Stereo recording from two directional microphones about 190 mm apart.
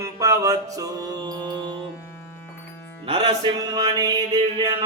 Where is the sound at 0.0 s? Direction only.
15° right (ahead or behind).